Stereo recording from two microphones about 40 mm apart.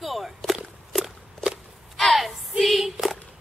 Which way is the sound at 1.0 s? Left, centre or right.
Centre.